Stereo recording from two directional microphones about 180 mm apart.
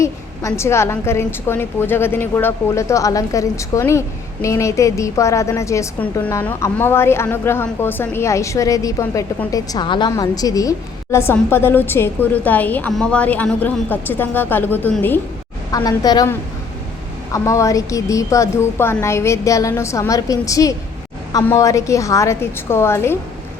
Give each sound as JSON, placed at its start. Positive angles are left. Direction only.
{"t": 0.0, "sound": "a woman's voice", "side_deg": 15}
{"t": 17.3, "sound": "a woman's voice", "side_deg": 15}